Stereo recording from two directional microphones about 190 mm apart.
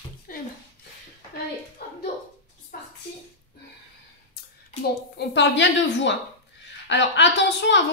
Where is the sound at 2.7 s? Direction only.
50° left (ahead or behind).